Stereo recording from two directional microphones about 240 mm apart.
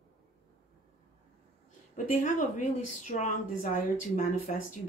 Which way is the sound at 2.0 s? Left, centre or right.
Left.